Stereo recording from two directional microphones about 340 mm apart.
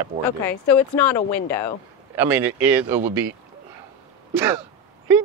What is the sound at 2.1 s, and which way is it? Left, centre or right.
Speech, centre.